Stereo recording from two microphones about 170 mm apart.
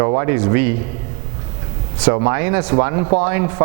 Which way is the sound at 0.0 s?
25° right (ahead or behind).